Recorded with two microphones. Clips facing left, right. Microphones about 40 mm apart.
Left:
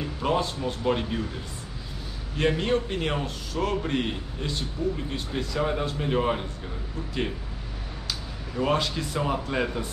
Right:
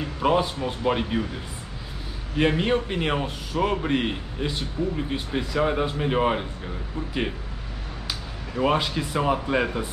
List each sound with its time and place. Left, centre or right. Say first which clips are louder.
0.0 s a man's voice: right 4 dB; centre
8.5 s a man's voice: right 2 dB; centre